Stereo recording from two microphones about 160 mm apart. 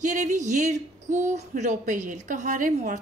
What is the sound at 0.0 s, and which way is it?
Speech, 50° right (ahead or behind).